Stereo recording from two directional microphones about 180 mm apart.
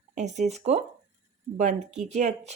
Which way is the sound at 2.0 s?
45° right (ahead or behind).